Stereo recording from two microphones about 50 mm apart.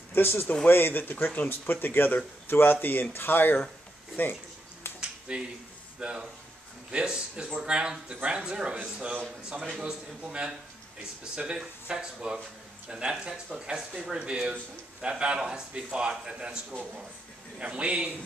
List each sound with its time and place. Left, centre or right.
0.1 s speech: left
1.2 s speech: left
1.5 s speech: left
5.3 s a man's voice: centre
11.5 s a man's voice: centre
17.6 s speech: right